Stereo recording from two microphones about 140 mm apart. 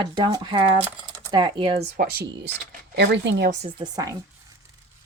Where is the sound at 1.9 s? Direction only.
90° right.